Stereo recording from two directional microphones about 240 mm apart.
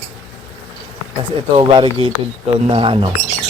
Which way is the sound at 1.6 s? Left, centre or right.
Right.